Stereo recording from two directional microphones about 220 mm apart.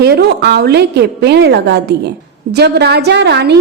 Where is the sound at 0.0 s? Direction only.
45° right (ahead or behind).